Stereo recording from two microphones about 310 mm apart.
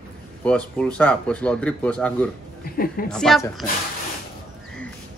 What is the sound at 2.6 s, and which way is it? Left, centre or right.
Speech, left.